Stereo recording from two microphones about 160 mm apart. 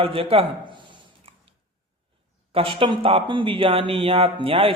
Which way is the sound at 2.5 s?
35° right (ahead or behind).